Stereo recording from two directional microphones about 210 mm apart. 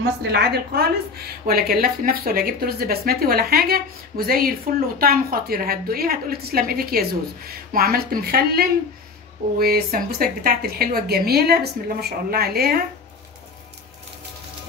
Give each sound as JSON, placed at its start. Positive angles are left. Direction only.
{"t": 0.2, "sound": "a woman's voice", "side_deg": -50}